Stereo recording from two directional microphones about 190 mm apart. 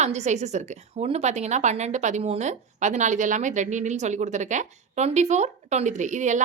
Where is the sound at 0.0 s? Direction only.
35° right (ahead or behind).